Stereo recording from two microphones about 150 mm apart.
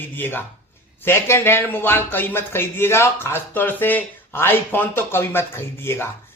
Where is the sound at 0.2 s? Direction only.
15° left (ahead or behind).